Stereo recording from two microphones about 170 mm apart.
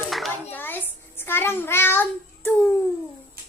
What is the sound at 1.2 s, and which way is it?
Child singing, 15° left (ahead or behind).